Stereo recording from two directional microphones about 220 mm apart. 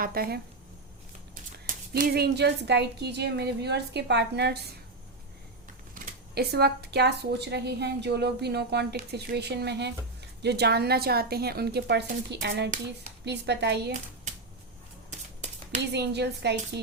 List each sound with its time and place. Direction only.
0.0 s speech: 45° right (ahead or behind)
1.5 s speech: 40° right (ahead or behind)
5.9 s speech: 45° right (ahead or behind)
14.3 s a sound: 30° right (ahead or behind)
15.8 s speech: 50° right (ahead or behind)